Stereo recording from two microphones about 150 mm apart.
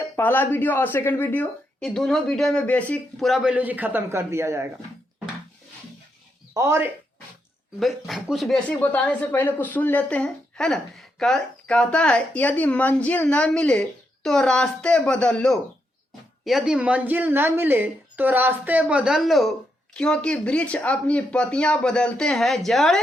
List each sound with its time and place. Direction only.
0.2 s a woman's voice: 15° left (ahead or behind); by 4.7 s 20° right (ahead or behind)
6.5 s speech: 20° right (ahead or behind)
7.8 s a woman's voice: centre (ahead or behind)